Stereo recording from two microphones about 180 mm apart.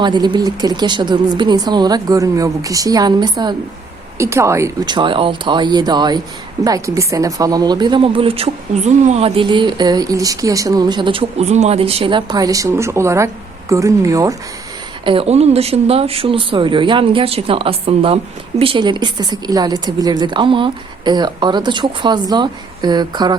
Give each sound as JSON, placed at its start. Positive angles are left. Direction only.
{"t": 0.0, "sound": "speech", "side_deg": -25}
{"t": 15.0, "sound": "speech", "side_deg": -30}